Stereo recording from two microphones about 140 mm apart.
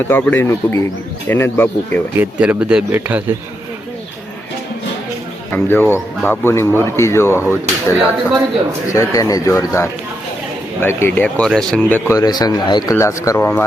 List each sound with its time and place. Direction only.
0.1 s speech: 15° left (ahead or behind)
2.1 s speech: 10° right (ahead or behind)
5.5 s speech: 15° left (ahead or behind)